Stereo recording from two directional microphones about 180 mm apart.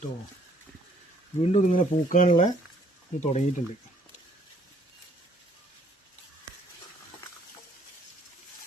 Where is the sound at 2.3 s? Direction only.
30° left (ahead or behind).